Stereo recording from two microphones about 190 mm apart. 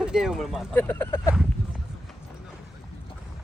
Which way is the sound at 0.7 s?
10° left (ahead or behind).